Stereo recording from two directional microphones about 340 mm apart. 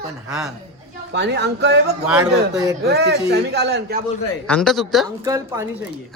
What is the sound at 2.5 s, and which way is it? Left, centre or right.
Speech, centre.